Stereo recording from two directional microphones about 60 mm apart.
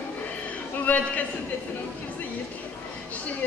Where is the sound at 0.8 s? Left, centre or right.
Left.